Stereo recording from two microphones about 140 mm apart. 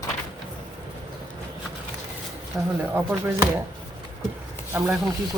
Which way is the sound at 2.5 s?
10° right (ahead or behind).